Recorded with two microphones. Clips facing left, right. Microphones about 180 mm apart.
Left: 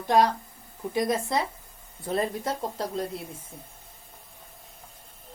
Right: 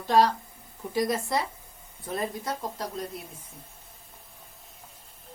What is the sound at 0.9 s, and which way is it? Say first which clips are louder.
Speech: left 1 dB; 20° left (ahead or behind).